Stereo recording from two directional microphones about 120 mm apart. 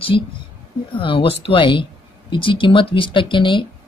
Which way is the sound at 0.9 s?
45° left (ahead or behind).